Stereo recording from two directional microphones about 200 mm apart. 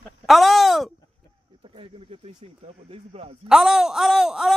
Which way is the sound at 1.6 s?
30° right (ahead or behind).